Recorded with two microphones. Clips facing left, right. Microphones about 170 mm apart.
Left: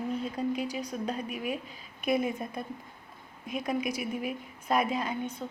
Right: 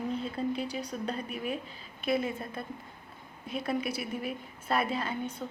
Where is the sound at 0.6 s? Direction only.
10° left (ahead or behind).